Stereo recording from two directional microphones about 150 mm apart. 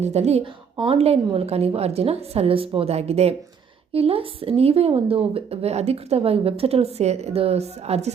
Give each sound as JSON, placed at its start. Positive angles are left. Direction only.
{"t": 0.0, "sound": "a woman's voice", "side_deg": -45}